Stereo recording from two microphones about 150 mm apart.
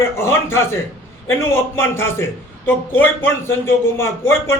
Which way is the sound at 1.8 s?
15° left (ahead or behind).